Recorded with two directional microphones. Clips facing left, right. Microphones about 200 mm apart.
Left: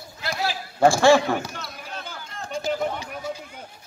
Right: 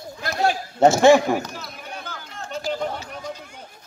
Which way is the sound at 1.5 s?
Centre (ahead or behind).